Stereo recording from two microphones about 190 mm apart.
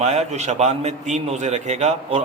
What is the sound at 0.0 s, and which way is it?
Speech, 35° right (ahead or behind).